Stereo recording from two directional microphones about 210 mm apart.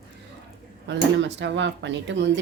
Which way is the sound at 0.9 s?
55° right (ahead or behind).